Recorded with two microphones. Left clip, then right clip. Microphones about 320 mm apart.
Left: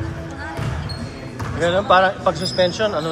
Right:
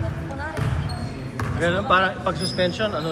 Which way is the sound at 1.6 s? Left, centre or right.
Centre.